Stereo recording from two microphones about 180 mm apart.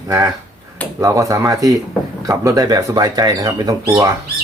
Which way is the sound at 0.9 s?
20° right (ahead or behind).